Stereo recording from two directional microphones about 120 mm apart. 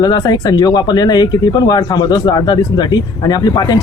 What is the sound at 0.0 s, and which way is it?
Speech, 35° left (ahead or behind).